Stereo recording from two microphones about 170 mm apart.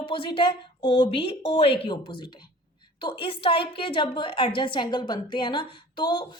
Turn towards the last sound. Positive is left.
turn(degrees=25)  # may be behind; listen again after turning